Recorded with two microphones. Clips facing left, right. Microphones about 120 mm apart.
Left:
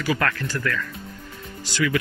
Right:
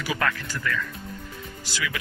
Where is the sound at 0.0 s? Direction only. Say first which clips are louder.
Left 3 dB; 5° right (ahead or behind).